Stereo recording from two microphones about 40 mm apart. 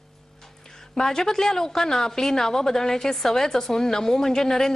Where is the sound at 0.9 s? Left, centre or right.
Centre.